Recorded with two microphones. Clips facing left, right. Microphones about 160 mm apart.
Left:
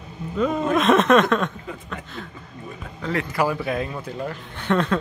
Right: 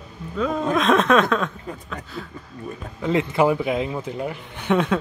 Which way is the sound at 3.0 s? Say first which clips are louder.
Right 4 dB; 20° right (ahead or behind).